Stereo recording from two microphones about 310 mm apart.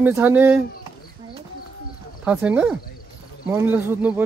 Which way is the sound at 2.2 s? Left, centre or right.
Centre.